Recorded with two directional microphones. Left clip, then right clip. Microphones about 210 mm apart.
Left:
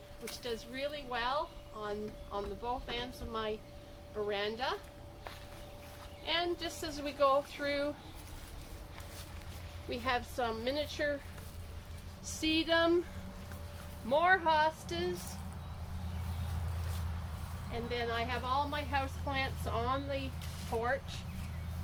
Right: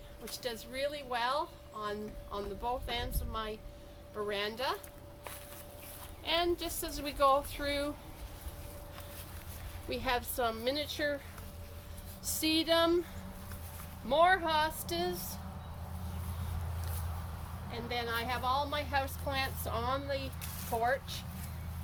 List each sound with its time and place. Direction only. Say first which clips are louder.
0.4 s speech: right 2 dB; 55° right (ahead or behind)
6.2 s speech: right 2 dB; 50° right (ahead or behind)
9.9 s a woman's voice: right 1 dB; 55° right (ahead or behind)
12.2 s a woman's voice: right 1 dB; 55° right (ahead or behind)
14.1 s a woman's voice: right 1 dB; 55° right (ahead or behind)
17.7 s speech: even; 55° right (ahead or behind)